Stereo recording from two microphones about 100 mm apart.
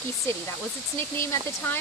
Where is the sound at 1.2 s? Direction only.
25° left (ahead or behind).